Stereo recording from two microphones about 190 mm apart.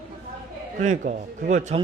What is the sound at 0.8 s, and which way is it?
A man's voice, 40° right (ahead or behind).